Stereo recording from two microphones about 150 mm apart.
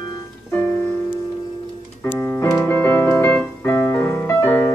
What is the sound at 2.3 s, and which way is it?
Keyboard, 20° left (ahead or behind).